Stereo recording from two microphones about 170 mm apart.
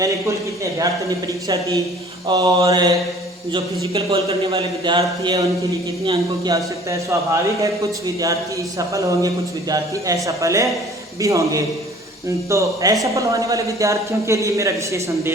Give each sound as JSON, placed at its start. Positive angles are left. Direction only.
{"t": 0.0, "sound": "a man's voice", "side_deg": -20}
{"t": 3.5, "sound": "a man's voice", "side_deg": -30}